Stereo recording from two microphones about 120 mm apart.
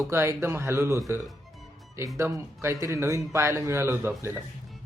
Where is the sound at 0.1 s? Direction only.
20° right (ahead or behind).